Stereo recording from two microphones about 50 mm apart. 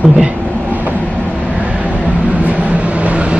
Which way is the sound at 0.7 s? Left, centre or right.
Right.